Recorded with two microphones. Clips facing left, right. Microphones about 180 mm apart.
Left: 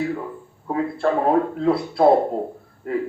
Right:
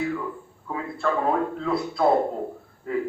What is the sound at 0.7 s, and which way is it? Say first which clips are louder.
Speech: left 6 dB; 35° left (ahead or behind).